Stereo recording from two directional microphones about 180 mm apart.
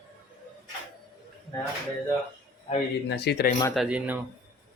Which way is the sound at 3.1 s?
65° left (ahead or behind).